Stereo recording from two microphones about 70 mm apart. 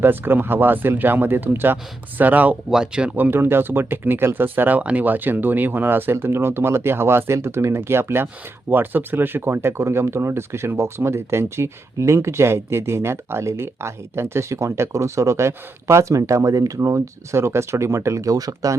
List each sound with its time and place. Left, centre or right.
0.0 s speech: right
2.6 s speech: centre
3.2 s speech: right